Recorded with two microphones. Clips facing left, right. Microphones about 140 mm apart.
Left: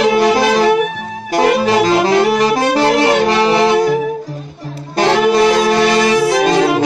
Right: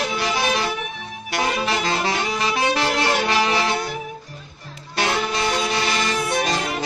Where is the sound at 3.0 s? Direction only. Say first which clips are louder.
Left 9 dB; 60° left (ahead or behind).